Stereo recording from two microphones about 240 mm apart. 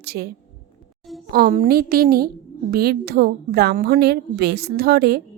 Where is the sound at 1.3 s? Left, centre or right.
Right.